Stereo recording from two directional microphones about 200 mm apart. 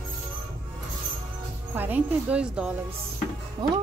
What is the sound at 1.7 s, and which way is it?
Speech, 10° right (ahead or behind).